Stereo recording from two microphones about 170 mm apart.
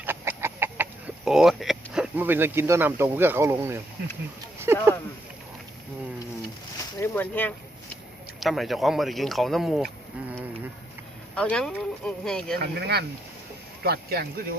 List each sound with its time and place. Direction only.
0.0 s chicken: 10° right (ahead or behind)
4.6 s a sound: 15° right (ahead or behind)
7.0 s speech: 10° left (ahead or behind)
8.4 s speech: centre (ahead or behind)
11.3 s speech: 5° left (ahead or behind)
12.5 s speech: 70° right (ahead or behind)